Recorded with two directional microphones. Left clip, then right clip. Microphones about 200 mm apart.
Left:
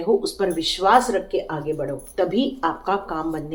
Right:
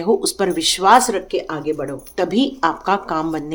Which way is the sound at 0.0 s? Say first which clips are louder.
Right 3 dB; 50° right (ahead or behind).